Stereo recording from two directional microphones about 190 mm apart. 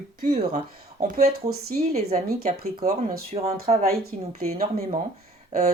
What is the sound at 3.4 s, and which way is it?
Speech, 35° right (ahead or behind).